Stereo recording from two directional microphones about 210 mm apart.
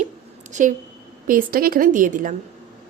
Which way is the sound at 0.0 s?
35° right (ahead or behind).